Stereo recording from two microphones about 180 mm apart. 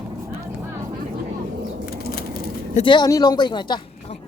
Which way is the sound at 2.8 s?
25° left (ahead or behind).